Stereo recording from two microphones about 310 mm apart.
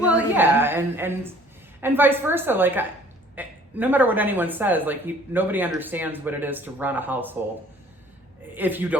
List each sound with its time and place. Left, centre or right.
0.0 s a woman's voice: centre
8.5 s speech: centre